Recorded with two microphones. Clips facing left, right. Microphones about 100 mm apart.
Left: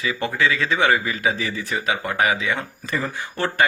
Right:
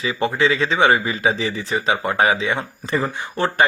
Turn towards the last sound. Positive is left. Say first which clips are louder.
# right 3 dB
turn(degrees=-20)  # may be behind; listen again after turning